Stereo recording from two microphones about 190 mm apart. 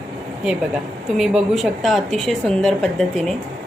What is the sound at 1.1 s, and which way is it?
A woman's voice, centre (ahead or behind).